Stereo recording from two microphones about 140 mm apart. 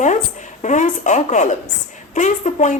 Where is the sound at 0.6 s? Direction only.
60° left (ahead or behind).